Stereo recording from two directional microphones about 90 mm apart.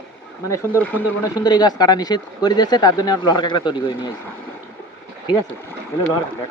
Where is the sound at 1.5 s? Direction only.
50° left (ahead or behind).